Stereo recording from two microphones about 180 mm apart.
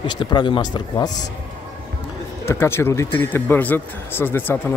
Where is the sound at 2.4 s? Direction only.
15° left (ahead or behind).